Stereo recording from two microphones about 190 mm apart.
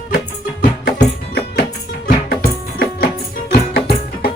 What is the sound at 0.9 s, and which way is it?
Music, 60° left (ahead or behind).